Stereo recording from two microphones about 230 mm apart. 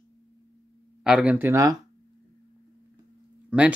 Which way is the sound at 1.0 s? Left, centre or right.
Centre.